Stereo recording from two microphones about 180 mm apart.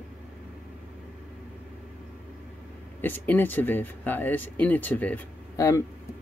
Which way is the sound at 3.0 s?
10° left (ahead or behind).